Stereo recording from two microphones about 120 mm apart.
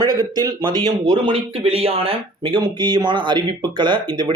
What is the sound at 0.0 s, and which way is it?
Speech, 35° right (ahead or behind).